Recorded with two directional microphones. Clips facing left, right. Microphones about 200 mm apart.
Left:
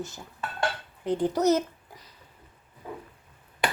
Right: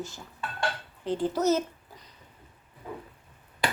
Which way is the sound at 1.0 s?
15° left (ahead or behind).